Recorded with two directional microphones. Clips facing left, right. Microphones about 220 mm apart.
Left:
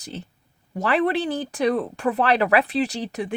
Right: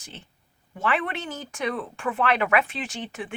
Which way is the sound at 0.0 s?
40° left (ahead or behind).